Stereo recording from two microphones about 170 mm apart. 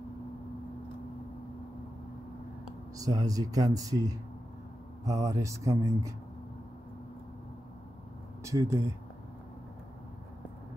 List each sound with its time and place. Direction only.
3.0 s speech: 20° right (ahead or behind)
8.5 s speech: 15° right (ahead or behind)